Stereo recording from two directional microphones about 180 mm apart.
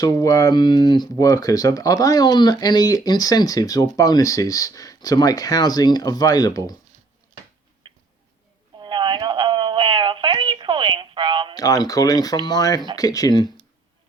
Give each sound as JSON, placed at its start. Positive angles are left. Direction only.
{"t": 0.0, "sound": "speech", "side_deg": 20}
{"t": 7.9, "sound": "a sound", "side_deg": -30}
{"t": 11.5, "sound": "speech", "side_deg": 20}